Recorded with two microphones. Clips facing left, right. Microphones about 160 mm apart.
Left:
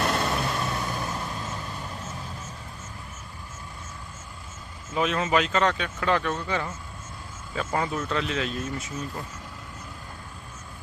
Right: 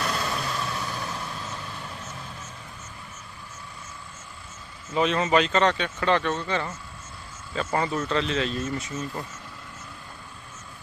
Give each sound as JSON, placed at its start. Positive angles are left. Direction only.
{"t": 0.0, "sound": "vehicle", "side_deg": 50}
{"t": 0.8, "sound": "vehicle", "side_deg": 15}
{"t": 4.9, "sound": "speech", "side_deg": 5}
{"t": 7.7, "sound": "speech", "side_deg": 0}